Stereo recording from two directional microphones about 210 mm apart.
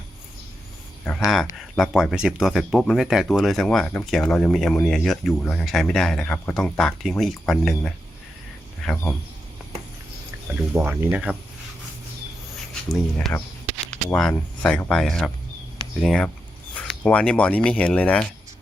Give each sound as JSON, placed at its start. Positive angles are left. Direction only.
{"t": 1.0, "sound": "speech", "side_deg": 5}
{"t": 10.8, "sound": "speech", "side_deg": -5}
{"t": 12.9, "sound": "speech", "side_deg": 0}